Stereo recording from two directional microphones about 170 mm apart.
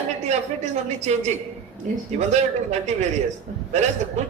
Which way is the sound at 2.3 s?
40° right (ahead or behind).